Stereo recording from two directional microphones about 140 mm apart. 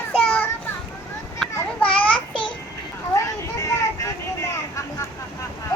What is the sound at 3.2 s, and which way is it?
Vehicle, 20° left (ahead or behind).